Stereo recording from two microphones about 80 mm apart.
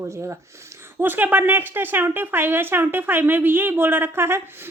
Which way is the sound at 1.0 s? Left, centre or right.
Right.